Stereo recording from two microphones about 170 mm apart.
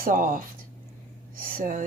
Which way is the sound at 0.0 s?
55° right (ahead or behind).